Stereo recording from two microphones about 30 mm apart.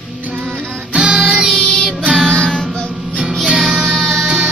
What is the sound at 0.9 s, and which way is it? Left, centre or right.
Music, right.